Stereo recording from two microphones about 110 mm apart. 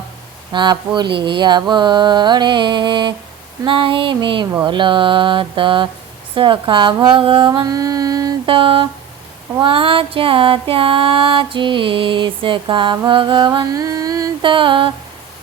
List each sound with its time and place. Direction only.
0.5 s music: 45° right (ahead or behind)
8.4 s music: 50° right (ahead or behind)
13.1 s a sound: 50° right (ahead or behind); by 14.3 s 30° right (ahead or behind)
14.4 s music: 50° right (ahead or behind)